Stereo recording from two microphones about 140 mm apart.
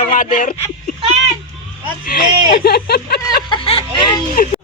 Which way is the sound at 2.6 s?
90° left.